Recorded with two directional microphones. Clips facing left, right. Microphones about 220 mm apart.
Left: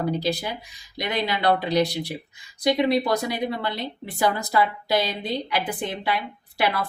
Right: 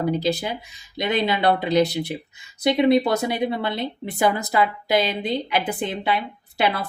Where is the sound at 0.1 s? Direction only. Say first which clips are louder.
Right 3 dB; 20° right (ahead or behind).